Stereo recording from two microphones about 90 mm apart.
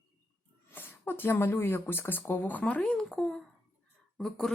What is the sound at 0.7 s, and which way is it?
Speech, 25° left (ahead or behind).